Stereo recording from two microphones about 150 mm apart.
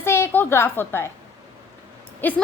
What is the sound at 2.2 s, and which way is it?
Speech, 10° left (ahead or behind).